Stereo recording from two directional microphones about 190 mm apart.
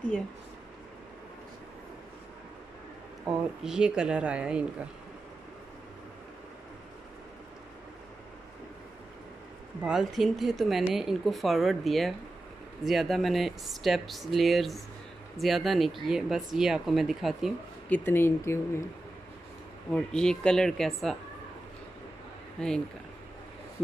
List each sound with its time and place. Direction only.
3.6 s speech: 5° right (ahead or behind)
9.8 s speech: centre (ahead or behind); by 18.9 s 15° left (ahead or behind)
19.9 s speech: 5° left (ahead or behind)
22.6 s speech: 5° left (ahead or behind)